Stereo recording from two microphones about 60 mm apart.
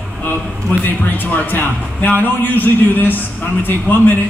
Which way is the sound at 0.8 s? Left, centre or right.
Left.